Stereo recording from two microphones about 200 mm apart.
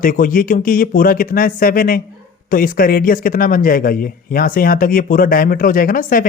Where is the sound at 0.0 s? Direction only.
45° left (ahead or behind).